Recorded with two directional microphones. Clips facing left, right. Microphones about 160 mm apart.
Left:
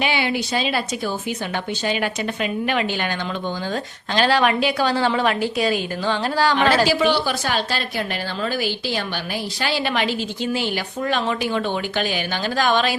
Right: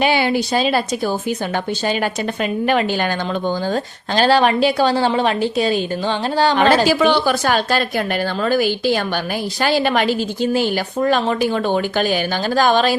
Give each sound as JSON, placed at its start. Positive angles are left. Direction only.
{"t": 0.0, "sound": "a woman's voice", "side_deg": -40}
{"t": 6.8, "sound": "a woman's voice", "side_deg": -55}